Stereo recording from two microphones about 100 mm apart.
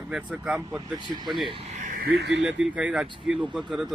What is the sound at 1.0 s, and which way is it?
Speech, 50° right (ahead or behind).